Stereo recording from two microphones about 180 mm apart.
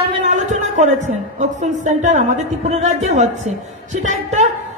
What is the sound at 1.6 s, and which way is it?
Speech, 40° right (ahead or behind).